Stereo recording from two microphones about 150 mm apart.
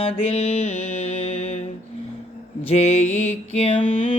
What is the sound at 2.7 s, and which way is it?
Mantra, 45° left (ahead or behind).